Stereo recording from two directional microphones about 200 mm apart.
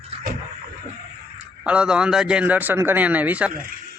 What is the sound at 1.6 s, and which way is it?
A man's voice, 5° right (ahead or behind).